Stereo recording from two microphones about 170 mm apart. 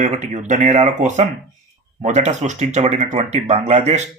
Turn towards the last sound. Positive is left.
turn(degrees=-40)  # may be behind; listen again after turning